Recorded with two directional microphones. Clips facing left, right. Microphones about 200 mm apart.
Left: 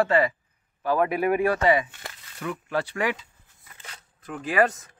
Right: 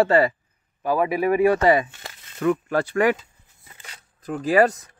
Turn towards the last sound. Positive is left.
turn(degrees=-35)  # may be behind; listen again after turning